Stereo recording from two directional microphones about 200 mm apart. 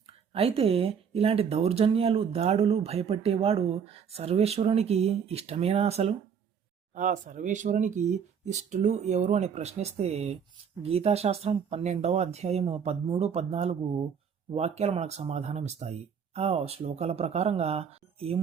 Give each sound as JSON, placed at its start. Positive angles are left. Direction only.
{"t": 0.3, "sound": "speech", "side_deg": -30}